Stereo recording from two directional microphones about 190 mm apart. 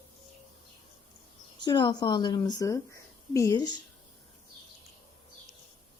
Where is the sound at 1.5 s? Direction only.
25° left (ahead or behind).